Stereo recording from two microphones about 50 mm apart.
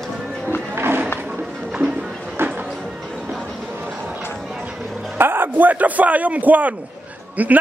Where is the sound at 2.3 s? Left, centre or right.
Right.